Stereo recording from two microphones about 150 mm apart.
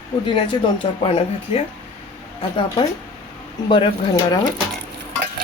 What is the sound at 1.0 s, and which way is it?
Speech, 40° left (ahead or behind).